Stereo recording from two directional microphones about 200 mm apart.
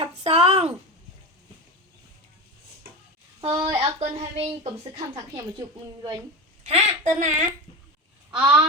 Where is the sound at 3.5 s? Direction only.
15° right (ahead or behind).